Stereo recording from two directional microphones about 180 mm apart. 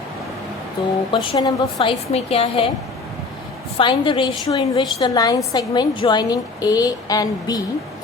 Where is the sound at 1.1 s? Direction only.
25° left (ahead or behind).